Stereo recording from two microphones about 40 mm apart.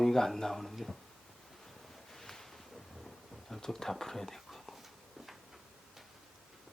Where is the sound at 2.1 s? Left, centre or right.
Centre.